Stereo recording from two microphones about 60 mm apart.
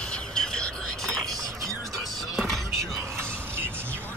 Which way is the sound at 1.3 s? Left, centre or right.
Right.